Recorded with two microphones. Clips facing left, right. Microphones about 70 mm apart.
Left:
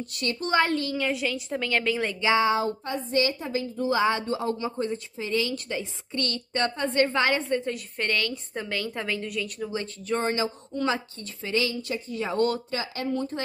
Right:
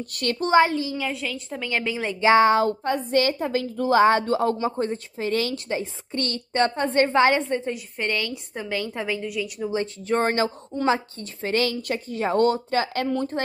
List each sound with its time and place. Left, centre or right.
0.1 s a woman's voice: right
0.7 s a woman's voice: centre
1.0 s a woman's voice: centre
1.7 s a woman's voice: centre
2.2 s a woman's voice: right
5.7 s a woman's voice: right
9.2 s a woman's voice: centre
9.7 s a woman's voice: right
10.1 s a woman's voice: right
10.7 s speech: right
11.5 s a woman's voice: right
12.2 s a woman's voice: right
13.0 s a woman's voice: right